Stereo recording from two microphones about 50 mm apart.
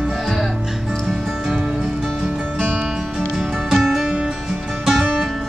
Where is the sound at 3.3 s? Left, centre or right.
Centre.